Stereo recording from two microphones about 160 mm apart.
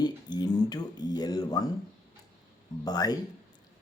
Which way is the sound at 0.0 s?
25° left (ahead or behind).